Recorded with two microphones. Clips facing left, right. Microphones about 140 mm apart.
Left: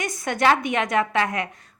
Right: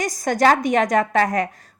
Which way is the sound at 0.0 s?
35° right (ahead or behind).